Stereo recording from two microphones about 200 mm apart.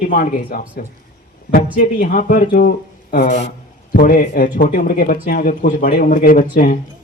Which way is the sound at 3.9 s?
45° left (ahead or behind).